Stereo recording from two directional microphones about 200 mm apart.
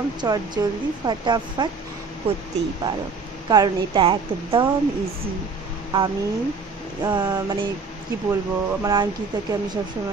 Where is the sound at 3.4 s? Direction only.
20° right (ahead or behind).